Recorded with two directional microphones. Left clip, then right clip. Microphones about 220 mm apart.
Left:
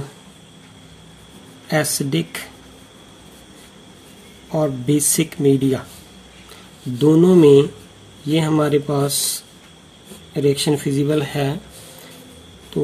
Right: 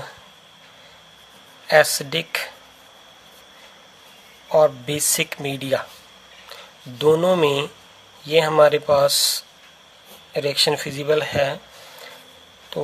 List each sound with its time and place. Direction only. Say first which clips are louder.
1.7 s speech: right 5 dB; 35° right (ahead or behind)
4.5 s speech: right 3 dB; 35° right (ahead or behind)
12.7 s a sound: left 4 dB; 30° right (ahead or behind)